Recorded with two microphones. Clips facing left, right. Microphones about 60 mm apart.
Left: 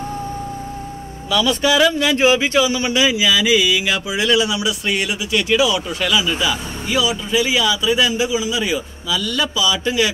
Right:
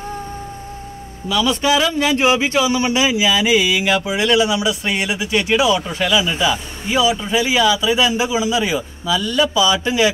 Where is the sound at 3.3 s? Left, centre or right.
Right.